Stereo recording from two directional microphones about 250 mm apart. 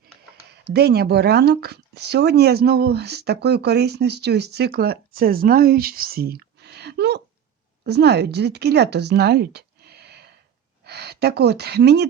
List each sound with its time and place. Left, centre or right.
0.6 s speech: right